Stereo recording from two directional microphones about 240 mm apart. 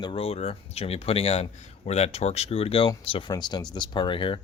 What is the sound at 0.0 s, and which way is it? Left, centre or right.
Speech, left.